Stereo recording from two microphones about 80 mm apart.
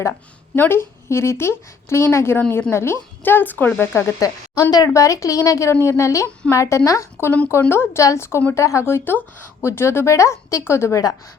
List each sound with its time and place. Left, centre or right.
0.1 s a woman's voice: left
4.2 s a woman's voice: left
4.9 s a woman's voice: left